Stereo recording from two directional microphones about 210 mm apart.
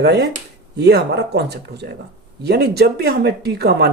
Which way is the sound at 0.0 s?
50° right (ahead or behind).